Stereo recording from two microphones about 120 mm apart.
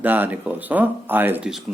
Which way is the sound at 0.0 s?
15° right (ahead or behind).